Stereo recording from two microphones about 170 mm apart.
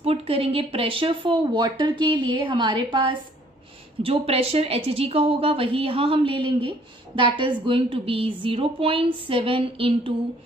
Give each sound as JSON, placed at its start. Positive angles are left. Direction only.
{"t": 0.0, "sound": "a woman's voice", "side_deg": -35}